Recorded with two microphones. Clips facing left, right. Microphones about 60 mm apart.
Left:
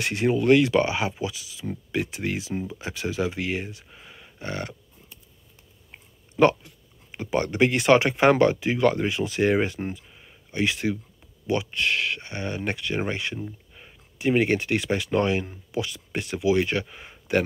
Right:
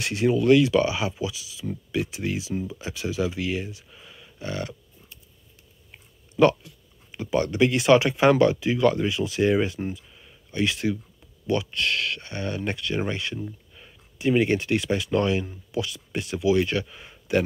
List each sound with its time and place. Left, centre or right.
0.0 s speech: left
5.9 s speech: left